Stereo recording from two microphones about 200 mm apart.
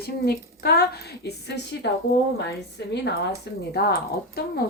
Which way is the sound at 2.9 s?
55° left (ahead or behind).